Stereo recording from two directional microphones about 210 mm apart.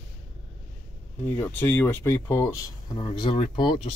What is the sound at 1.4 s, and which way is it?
Speech, 10° left (ahead or behind).